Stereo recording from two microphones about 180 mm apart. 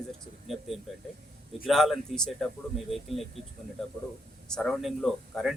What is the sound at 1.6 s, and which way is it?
Speech, centre (ahead or behind).